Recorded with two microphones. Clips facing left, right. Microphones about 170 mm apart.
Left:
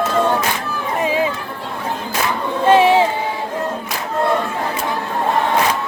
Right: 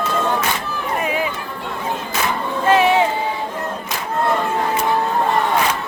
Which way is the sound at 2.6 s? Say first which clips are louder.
Left 3 dB; 30° left (ahead or behind).